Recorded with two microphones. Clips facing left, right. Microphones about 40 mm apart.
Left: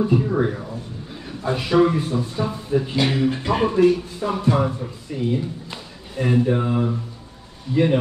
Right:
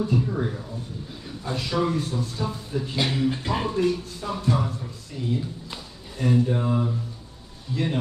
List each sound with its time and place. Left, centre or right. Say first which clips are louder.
0.0 s a man's voice: left 6 dB; left